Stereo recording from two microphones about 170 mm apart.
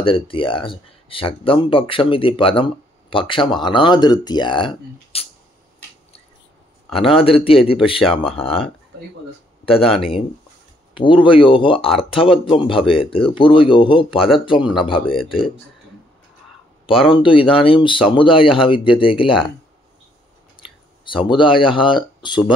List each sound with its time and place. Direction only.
0.0 s speech: 30° left (ahead or behind)
7.1 s speech: 35° left (ahead or behind)
9.7 s speech: 35° left (ahead or behind)
11.0 s speech: 30° left (ahead or behind)
14.6 s speech: centre (ahead or behind)
15.1 s speech: 30° left (ahead or behind)
17.1 s speech: 30° left (ahead or behind)
20.6 s clicking: 5° right (ahead or behind)
21.3 s speech: 30° left (ahead or behind)